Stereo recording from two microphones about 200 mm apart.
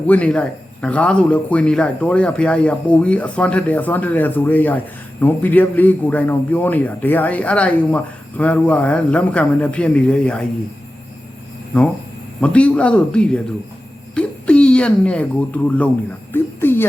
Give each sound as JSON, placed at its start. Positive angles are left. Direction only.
{"t": 0.1, "sound": "a man's voice", "side_deg": 5}
{"t": 12.4, "sound": "a man's voice", "side_deg": 5}
{"t": 16.3, "sound": "a sound", "side_deg": 10}